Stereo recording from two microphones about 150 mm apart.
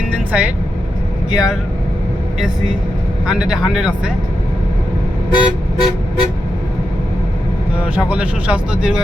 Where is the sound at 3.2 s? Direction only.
5° right (ahead or behind).